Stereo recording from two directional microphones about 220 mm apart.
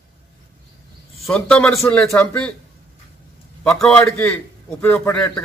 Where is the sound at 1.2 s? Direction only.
5° left (ahead or behind).